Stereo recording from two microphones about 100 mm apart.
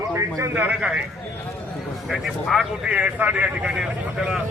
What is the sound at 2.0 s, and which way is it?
A man's voice, centre (ahead or behind).